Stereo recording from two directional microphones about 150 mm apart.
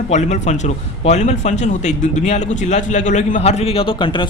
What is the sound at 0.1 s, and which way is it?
A man's voice, 50° left (ahead or behind).